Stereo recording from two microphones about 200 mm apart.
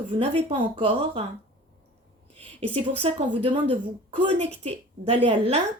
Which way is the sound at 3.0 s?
30° right (ahead or behind).